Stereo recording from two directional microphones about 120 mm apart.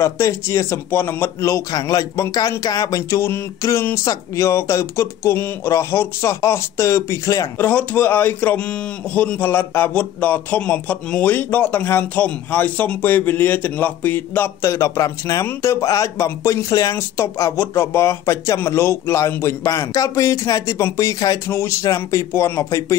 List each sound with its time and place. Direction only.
0.0 s a man's voice: 20° left (ahead or behind)
7.6 s a man's voice: 15° left (ahead or behind)